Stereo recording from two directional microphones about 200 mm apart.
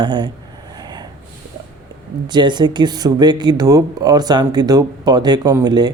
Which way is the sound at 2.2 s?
20° right (ahead or behind).